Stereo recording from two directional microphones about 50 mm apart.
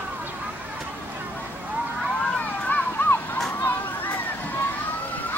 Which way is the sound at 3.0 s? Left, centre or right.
Left.